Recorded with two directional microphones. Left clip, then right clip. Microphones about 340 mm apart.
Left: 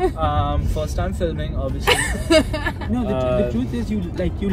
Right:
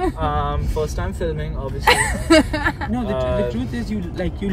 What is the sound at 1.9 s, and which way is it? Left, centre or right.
Speech, centre.